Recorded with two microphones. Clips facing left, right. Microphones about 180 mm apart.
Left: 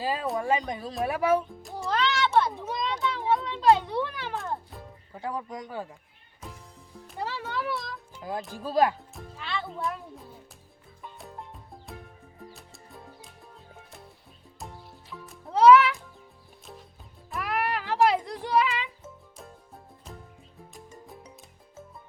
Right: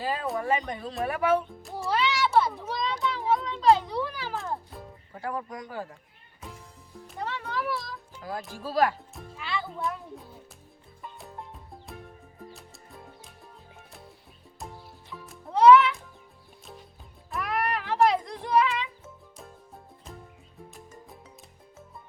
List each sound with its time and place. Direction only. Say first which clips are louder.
0.4 s speech: left 1 dB; 10° left (ahead or behind)
1.4 s music: even; 5° right (ahead or behind)
5.1 s speech: even; 15° left (ahead or behind)
5.7 s speech: even; centre (ahead or behind)
6.4 s music: even; centre (ahead or behind)
7.1 s a child's voice: even; centre (ahead or behind)
8.2 s speech: left 2 dB; 20° left (ahead or behind)
9.1 s speech: right 1 dB; centre (ahead or behind)
11.0 s music: even; centre (ahead or behind)
14.6 s music: right 1 dB; centre (ahead or behind)
17.3 s music: even; 5° left (ahead or behind)